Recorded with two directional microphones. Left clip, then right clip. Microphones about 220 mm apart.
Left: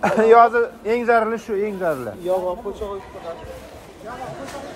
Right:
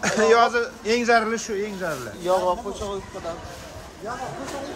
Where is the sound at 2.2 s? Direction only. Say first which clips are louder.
Right 1 dB; 45° right (ahead or behind).